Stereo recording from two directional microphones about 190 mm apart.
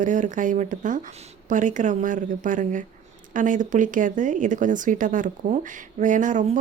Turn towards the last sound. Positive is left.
turn(degrees=-40)  # may be behind; listen again after turning